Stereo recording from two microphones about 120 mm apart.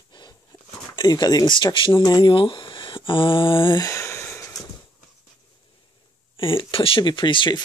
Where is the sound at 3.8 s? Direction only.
25° left (ahead or behind).